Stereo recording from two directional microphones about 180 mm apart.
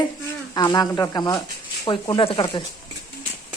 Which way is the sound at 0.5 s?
20° left (ahead or behind).